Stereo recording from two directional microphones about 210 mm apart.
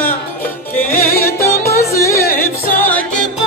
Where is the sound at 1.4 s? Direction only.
15° left (ahead or behind).